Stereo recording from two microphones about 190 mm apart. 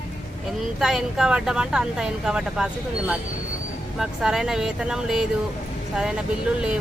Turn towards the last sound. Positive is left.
turn(degrees=-5)  # may be behind; listen again after turning